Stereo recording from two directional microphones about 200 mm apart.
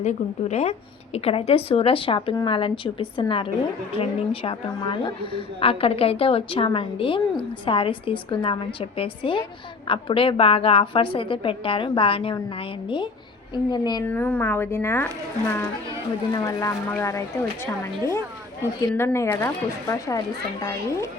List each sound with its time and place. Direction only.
0.0 s a woman's voice: 35° left (ahead or behind)
14.1 s speech: 10° left (ahead or behind)